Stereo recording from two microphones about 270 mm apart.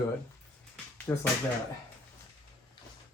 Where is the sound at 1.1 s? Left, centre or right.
Centre.